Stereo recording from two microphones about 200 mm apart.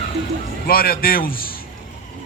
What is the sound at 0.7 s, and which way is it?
Speech, 45° left (ahead or behind).